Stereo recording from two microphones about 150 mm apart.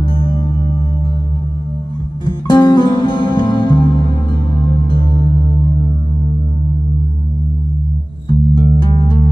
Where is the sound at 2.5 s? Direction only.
25° left (ahead or behind).